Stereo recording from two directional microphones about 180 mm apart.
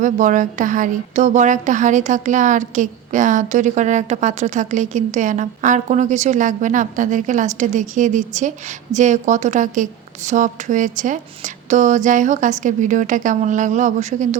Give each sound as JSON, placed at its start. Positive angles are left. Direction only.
{"t": 0.0, "sound": "speech", "side_deg": -45}